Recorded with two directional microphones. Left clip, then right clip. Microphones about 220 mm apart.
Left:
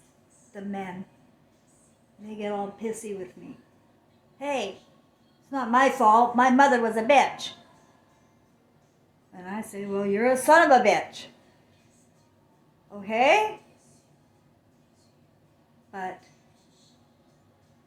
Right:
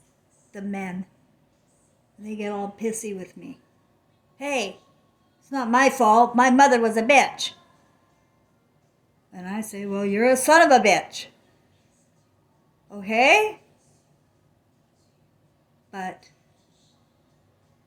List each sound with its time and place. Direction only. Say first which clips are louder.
0.5 s a woman's voice: right 2 dB; 45° right (ahead or behind)
2.2 s a woman's voice: right 1 dB; 45° right (ahead or behind)
4.4 s a woman's voice: right 3 dB; 45° right (ahead or behind)
9.3 s a woman's voice: right 2 dB; 45° right (ahead or behind)
12.9 s a woman's voice: right 3 dB; 45° right (ahead or behind)
15.9 s speech: right 2 dB; 45° right (ahead or behind)